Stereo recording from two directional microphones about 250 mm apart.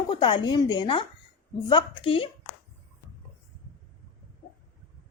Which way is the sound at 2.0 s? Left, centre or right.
Left.